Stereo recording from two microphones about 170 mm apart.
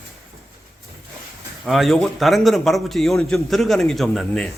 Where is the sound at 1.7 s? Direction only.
Centre (ahead or behind).